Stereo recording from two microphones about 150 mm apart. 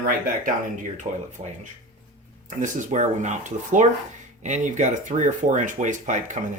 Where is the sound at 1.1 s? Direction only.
55° right (ahead or behind).